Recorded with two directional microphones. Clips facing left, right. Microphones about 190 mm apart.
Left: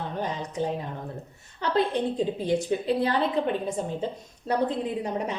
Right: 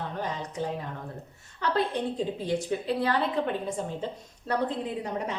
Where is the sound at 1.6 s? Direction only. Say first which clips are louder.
Left 3 dB; 20° left (ahead or behind).